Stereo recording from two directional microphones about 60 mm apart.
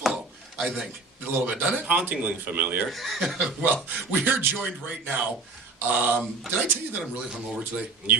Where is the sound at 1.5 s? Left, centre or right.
Right.